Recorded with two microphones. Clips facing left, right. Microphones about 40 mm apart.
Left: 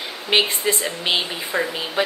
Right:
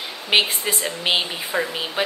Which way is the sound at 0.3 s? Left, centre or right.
Centre.